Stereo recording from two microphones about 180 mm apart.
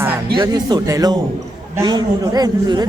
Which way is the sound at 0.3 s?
20° right (ahead or behind).